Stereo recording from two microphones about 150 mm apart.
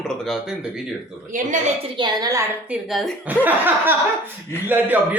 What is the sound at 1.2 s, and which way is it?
Speech, 60° right (ahead or behind).